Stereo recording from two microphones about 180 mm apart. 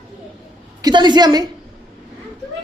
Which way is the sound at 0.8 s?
25° right (ahead or behind).